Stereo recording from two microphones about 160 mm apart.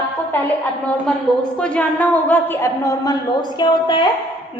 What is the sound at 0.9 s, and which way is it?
A woman's voice, 5° left (ahead or behind).